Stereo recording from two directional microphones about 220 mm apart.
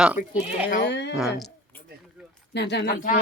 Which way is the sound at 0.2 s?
35° left (ahead or behind).